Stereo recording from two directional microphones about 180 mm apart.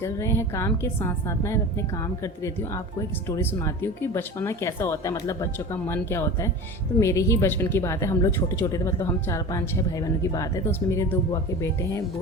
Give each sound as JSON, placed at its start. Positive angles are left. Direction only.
{"t": 0.0, "sound": "a woman's voice", "side_deg": 15}